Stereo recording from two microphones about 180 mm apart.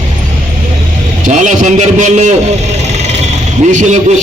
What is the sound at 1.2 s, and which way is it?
A man's voice, 45° right (ahead or behind).